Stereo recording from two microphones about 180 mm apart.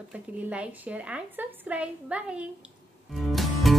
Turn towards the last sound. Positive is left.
turn(degrees=0)  # may be behind; listen again after turning